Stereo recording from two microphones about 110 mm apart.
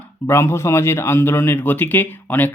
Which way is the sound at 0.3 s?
25° left (ahead or behind).